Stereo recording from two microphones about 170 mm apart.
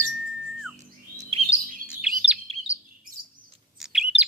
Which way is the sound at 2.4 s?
35° right (ahead or behind).